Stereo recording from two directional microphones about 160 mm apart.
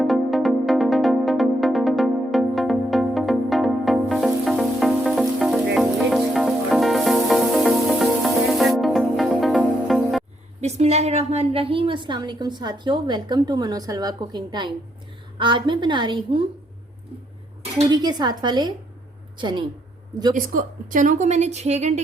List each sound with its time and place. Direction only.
0.0 s music: centre (ahead or behind)
10.6 s a woman's voice: 45° right (ahead or behind)
17.8 s a woman's voice: 25° right (ahead or behind)
20.3 s a woman's voice: 60° right (ahead or behind)